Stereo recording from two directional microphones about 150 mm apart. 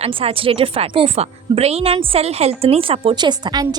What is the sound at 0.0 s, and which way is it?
A woman's voice, 40° right (ahead or behind).